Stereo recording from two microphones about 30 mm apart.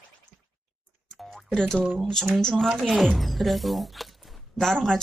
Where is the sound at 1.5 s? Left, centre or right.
Centre.